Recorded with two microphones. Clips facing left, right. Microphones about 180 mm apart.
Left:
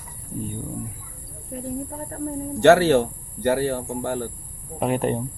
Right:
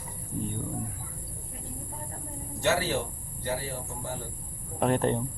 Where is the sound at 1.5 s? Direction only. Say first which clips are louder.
Left 16 dB; 60° left (ahead or behind).